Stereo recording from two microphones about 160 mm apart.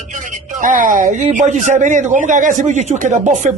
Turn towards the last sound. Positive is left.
turn(degrees=-50)  # may be behind; listen again after turning